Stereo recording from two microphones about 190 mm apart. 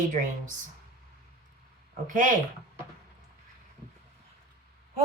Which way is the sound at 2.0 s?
45° right (ahead or behind).